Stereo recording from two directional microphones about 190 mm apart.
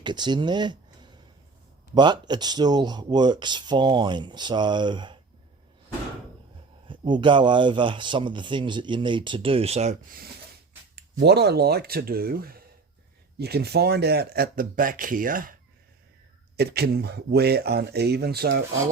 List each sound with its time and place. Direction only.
0.0 s a man's voice: 25° right (ahead or behind)
2.0 s a man's voice: 25° right (ahead or behind)
6.8 s a man's voice: 25° right (ahead or behind); by 10.2 s 45° right (ahead or behind)
11.2 s speech: 60° right (ahead or behind)
16.6 s speech: 55° right (ahead or behind)